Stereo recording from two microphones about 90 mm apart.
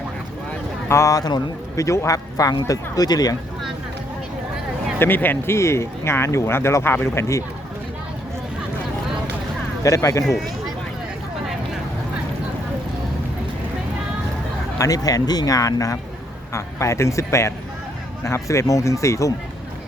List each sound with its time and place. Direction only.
0.9 s speech: 35° left (ahead or behind)
4.9 s speech: 20° left (ahead or behind)
9.8 s speech: 35° left (ahead or behind)
14.8 s speech: 40° left (ahead or behind)